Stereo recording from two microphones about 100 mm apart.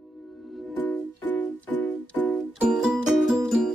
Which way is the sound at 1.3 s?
20° left (ahead or behind).